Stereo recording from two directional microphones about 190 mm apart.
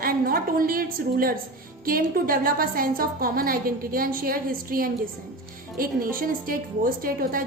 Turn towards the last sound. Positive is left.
turn(degrees=-50)  # may be behind; listen again after turning